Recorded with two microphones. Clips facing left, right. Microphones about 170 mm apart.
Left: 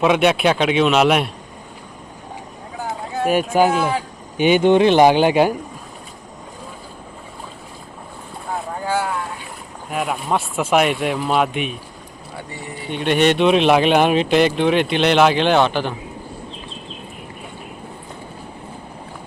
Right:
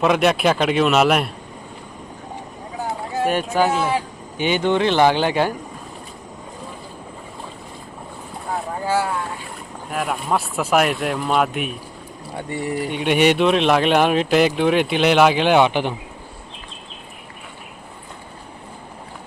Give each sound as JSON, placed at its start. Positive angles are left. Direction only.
{"t": 0.0, "sound": "speech", "side_deg": 0}
{"t": 3.2, "sound": "speech", "side_deg": 5}
{"t": 9.9, "sound": "speech", "side_deg": 0}
{"t": 12.9, "sound": "speech", "side_deg": -10}
{"t": 13.4, "sound": "speech", "side_deg": 0}